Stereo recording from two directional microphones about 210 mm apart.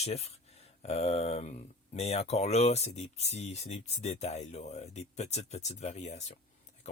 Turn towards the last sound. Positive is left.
turn(degrees=30)  # may be behind; listen again after turning